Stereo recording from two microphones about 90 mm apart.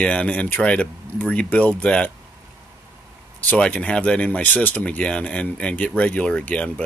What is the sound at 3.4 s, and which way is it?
Speech, 10° left (ahead or behind).